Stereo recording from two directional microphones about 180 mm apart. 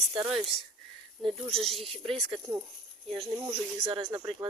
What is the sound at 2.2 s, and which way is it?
Speech, 25° right (ahead or behind).